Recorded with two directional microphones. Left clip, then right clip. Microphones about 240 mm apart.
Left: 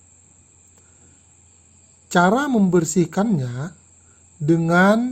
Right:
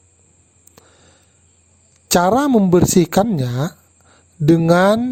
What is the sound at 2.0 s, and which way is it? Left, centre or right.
Speech, right.